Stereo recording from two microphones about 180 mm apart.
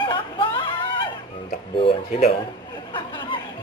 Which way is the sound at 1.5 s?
30° left (ahead or behind).